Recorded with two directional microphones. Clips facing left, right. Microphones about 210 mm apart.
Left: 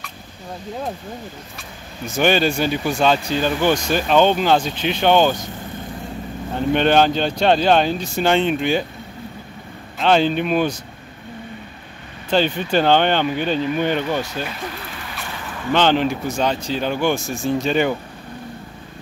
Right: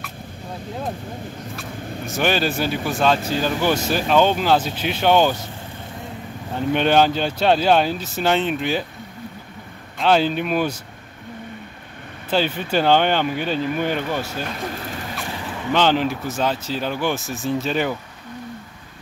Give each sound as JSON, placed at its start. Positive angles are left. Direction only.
{"t": 1.6, "sound": "speech", "side_deg": 0}
{"t": 6.7, "sound": "speech", "side_deg": -5}
{"t": 9.9, "sound": "speech", "side_deg": -5}
{"t": 12.3, "sound": "speech", "side_deg": -5}
{"t": 14.7, "sound": "a sound", "side_deg": -40}
{"t": 15.2, "sound": "vehicle", "side_deg": -30}
{"t": 15.7, "sound": "speech", "side_deg": -5}